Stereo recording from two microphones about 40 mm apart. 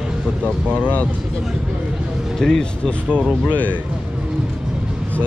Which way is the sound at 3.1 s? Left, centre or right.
Right.